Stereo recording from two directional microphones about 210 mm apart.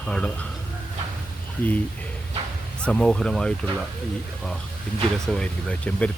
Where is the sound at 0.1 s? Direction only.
5° left (ahead or behind).